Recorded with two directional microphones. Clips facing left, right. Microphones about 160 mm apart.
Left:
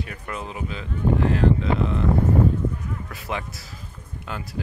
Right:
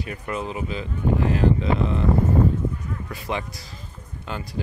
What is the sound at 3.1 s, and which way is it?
Speech, 5° left (ahead or behind).